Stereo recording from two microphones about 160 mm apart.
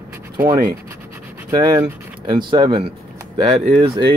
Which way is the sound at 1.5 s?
25° right (ahead or behind).